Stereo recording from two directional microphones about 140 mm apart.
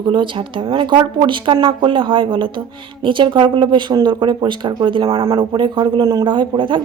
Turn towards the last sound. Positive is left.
turn(degrees=-35)  # may be behind; listen again after turning